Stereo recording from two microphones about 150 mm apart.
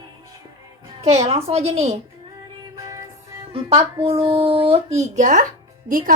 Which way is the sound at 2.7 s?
25° right (ahead or behind).